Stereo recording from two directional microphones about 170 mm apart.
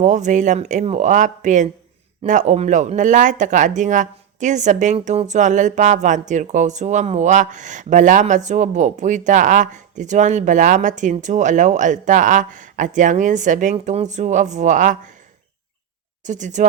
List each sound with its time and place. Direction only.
0.0 s speech: 45° right (ahead or behind)
16.2 s speech: 45° right (ahead or behind)